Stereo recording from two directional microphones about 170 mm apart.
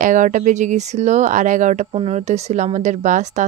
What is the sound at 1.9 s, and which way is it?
Speech, 35° right (ahead or behind).